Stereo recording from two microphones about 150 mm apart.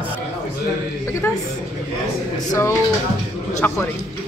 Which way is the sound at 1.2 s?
15° left (ahead or behind).